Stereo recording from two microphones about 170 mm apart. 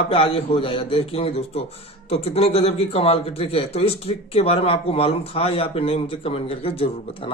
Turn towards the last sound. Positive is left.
turn(degrees=35)  # may be behind; listen again after turning